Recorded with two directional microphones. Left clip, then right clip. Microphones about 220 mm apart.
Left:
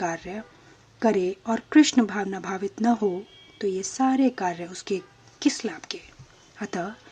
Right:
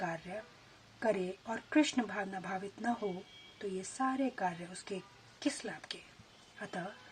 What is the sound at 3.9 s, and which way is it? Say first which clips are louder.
Speech: left 11 dB; 40° left (ahead or behind).